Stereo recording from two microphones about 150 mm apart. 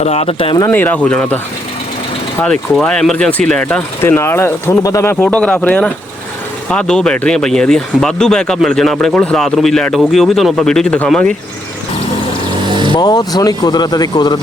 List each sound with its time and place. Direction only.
0.0 s speech: 45° left (ahead or behind)
0.7 s speech: 10° left (ahead or behind)
2.4 s speech: 5° left (ahead or behind)
12.6 s vehicle: 30° right (ahead or behind)
12.9 s speech: 30° left (ahead or behind)